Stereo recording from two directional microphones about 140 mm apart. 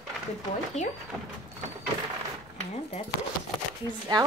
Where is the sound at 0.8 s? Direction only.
55° left (ahead or behind).